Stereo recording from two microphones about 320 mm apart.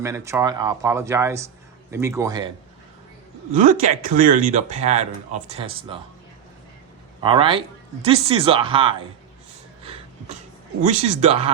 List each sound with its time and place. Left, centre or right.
0.0 s speech: centre
3.5 s speech: right
7.2 s speech: centre
10.8 s speech: right